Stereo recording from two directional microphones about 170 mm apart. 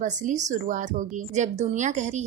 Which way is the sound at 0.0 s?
45° right (ahead or behind).